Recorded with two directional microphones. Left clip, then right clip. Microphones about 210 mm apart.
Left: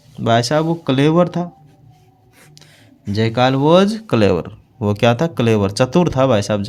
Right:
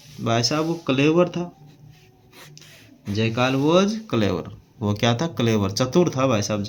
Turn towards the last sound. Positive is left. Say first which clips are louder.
# left 7 dB
turn(degrees=50)  # may be behind; listen again after turning